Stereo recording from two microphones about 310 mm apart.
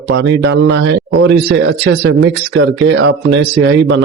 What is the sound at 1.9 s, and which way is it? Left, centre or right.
Speech, right.